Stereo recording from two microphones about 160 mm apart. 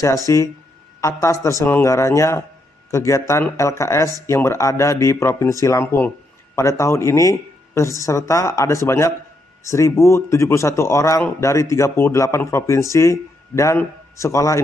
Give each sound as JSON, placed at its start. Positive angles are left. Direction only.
{"t": 0.3, "sound": "speech", "side_deg": 20}